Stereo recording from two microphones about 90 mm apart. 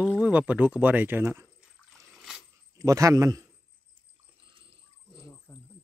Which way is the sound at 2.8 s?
40° right (ahead or behind).